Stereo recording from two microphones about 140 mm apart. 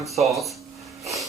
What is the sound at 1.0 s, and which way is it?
Wheeze, centre (ahead or behind).